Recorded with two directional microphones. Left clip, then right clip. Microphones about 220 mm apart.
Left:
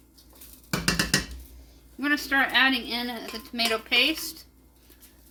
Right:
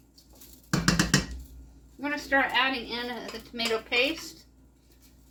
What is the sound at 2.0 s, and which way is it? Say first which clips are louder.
Speech: left 2 dB; 50° left (ahead or behind).